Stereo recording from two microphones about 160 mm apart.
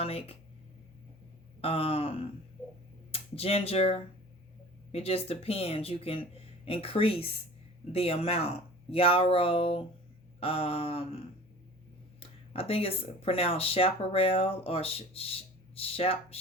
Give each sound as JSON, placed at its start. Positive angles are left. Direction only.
{"t": 0.0, "sound": "speech", "side_deg": 40}
{"t": 1.6, "sound": "speech", "side_deg": 35}
{"t": 12.2, "sound": "speech", "side_deg": 35}